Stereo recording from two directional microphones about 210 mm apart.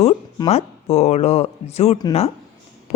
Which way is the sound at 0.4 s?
30° left (ahead or behind).